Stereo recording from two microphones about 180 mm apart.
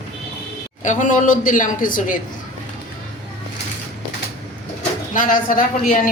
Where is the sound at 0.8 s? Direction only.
45° left (ahead or behind).